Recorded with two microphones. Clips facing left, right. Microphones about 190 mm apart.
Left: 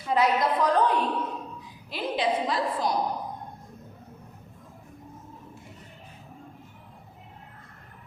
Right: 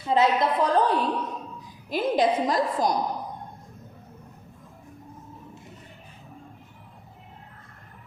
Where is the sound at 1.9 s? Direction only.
45° right (ahead or behind).